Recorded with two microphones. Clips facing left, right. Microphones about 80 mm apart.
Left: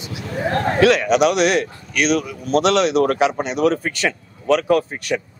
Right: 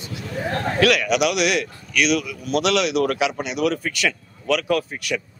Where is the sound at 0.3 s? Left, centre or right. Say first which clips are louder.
Left 5 dB; left.